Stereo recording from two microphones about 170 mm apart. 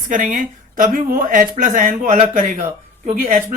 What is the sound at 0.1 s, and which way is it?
Speech, 50° right (ahead or behind).